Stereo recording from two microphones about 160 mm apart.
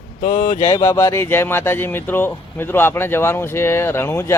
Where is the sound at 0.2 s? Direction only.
50° left (ahead or behind).